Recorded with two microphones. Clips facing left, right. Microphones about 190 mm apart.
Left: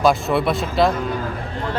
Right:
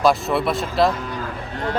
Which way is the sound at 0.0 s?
Centre (ahead or behind).